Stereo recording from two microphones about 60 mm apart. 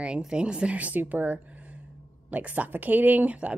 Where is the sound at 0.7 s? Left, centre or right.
Right.